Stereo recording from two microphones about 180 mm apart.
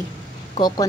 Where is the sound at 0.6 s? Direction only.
20° left (ahead or behind).